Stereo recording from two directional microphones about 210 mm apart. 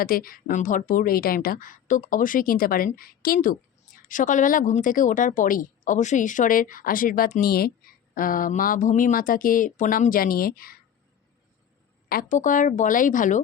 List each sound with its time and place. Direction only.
0.0 s a woman's voice: 45° left (ahead or behind)
12.0 s a woman's voice: 40° left (ahead or behind)